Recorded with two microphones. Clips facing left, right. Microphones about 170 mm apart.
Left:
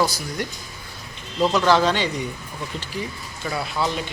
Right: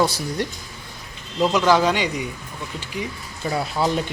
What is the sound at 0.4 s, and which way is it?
Speech, 30° right (ahead or behind).